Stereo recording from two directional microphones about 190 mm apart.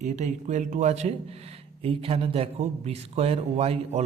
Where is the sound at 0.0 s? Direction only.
40° right (ahead or behind).